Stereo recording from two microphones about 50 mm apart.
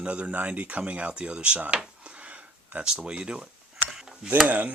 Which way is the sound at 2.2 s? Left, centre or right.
Right.